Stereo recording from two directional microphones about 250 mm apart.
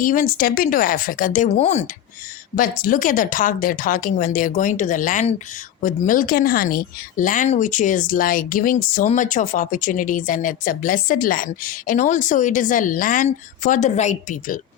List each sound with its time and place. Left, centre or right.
0.0 s a woman's voice: left